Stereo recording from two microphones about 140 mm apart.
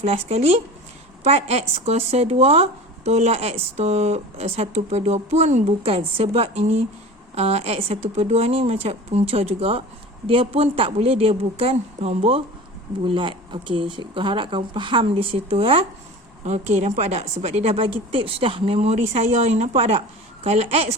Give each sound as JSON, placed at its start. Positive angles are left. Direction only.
{"t": 0.0, "sound": "speech", "side_deg": -50}